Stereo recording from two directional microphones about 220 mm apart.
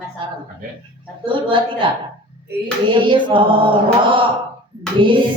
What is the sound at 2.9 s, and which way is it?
Chant, 20° right (ahead or behind).